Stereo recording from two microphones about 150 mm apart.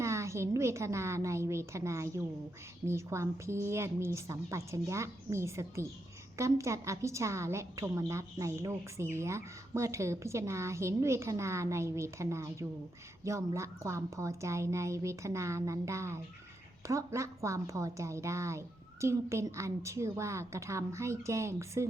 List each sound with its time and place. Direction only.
0.0 s a woman's voice: 20° right (ahead or behind)